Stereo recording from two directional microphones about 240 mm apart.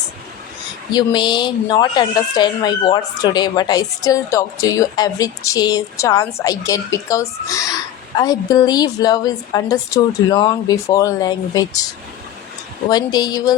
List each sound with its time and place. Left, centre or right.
0.9 s speech: centre
12.9 s speech: centre